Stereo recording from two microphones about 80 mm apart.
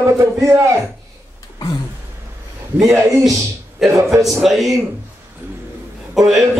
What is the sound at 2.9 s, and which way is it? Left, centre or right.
Speech, right.